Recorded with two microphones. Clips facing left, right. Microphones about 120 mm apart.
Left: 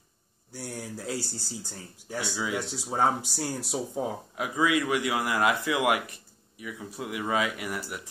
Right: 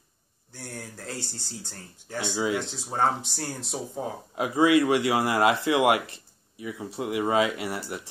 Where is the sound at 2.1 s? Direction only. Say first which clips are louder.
Right 4 dB; 20° right (ahead or behind).